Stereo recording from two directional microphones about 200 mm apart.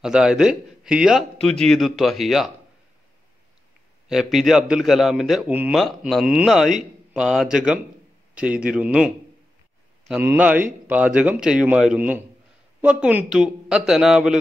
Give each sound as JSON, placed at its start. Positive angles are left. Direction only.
{"t": 0.0, "sound": "a man's voice", "side_deg": -5}
{"t": 4.1, "sound": "a man's voice", "side_deg": 0}